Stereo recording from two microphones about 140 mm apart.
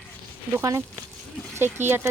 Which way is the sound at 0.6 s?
25° right (ahead or behind).